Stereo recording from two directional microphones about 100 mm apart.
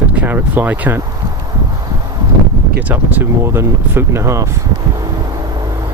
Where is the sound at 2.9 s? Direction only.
20° right (ahead or behind).